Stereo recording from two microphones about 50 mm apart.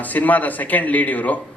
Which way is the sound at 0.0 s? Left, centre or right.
Left.